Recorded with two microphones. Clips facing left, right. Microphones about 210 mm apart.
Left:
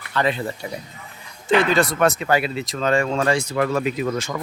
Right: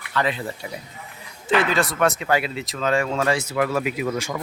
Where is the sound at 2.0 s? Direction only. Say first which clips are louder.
Left 2 dB; 40° left (ahead or behind).